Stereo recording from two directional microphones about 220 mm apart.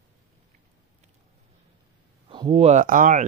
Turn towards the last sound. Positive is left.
turn(degrees=-35)  # may be behind; listen again after turning